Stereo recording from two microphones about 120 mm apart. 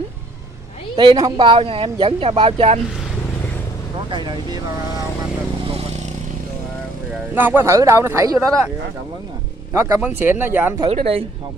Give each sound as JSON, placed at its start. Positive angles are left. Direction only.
{"t": 0.9, "sound": "speech", "side_deg": -35}
{"t": 4.1, "sound": "speech", "side_deg": -40}
{"t": 5.7, "sound": "vehicle", "side_deg": -60}
{"t": 7.3, "sound": "speech", "side_deg": -15}
{"t": 9.7, "sound": "speech", "side_deg": -25}
{"t": 10.9, "sound": "speech", "side_deg": -55}